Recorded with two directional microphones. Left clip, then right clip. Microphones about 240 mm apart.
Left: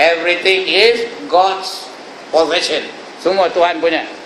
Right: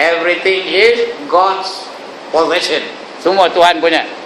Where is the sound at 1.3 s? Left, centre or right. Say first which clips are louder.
Right 1 dB; centre.